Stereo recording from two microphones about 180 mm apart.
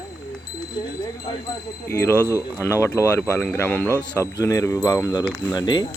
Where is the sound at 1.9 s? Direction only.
15° left (ahead or behind).